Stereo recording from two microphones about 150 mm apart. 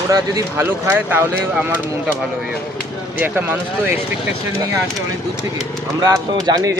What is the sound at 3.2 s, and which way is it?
Speech, 10° right (ahead or behind).